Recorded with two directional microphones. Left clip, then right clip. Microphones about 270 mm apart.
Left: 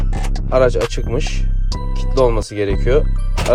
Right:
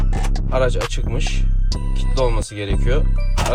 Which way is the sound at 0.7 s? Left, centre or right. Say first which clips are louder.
Left 6 dB; centre.